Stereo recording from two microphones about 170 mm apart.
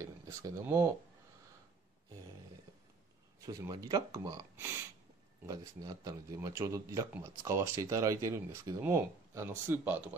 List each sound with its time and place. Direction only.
0.0 s speech: 20° right (ahead or behind)
3.3 s speech: 20° right (ahead or behind)